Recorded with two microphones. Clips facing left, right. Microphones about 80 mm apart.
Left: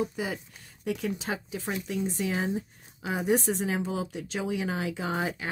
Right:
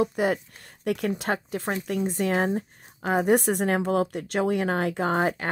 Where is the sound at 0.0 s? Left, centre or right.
Right.